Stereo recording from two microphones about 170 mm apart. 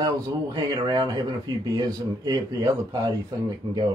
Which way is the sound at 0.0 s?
25° right (ahead or behind).